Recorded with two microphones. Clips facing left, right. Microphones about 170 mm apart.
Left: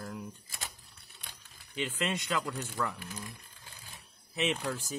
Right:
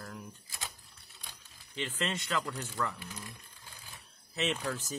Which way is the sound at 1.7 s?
10° left (ahead or behind).